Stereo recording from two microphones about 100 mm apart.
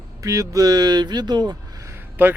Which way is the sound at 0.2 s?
35° right (ahead or behind).